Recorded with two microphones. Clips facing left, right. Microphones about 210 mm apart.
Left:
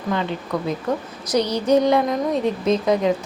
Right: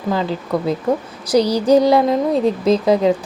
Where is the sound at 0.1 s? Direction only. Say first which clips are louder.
Right 4 dB; 35° right (ahead or behind).